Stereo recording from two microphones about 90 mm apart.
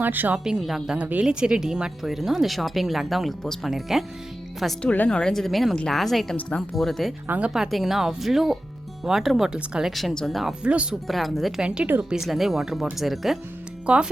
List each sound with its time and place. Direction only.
0.0 s a woman's voice: 20° right (ahead or behind)
0.3 s speech: 5° right (ahead or behind)
4.8 s speech: 10° left (ahead or behind)
7.3 s speech: 15° right (ahead or behind)
7.5 s speech: centre (ahead or behind)
10.6 s speech: 15° right (ahead or behind)
11.1 s speech: centre (ahead or behind)